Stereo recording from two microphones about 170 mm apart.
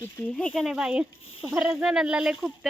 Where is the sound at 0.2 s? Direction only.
5° left (ahead or behind).